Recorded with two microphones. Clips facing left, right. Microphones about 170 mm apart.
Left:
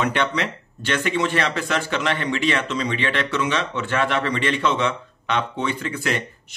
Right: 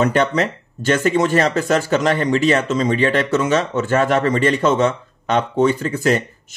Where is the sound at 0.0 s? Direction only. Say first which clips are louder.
Right 6 dB; 40° right (ahead or behind).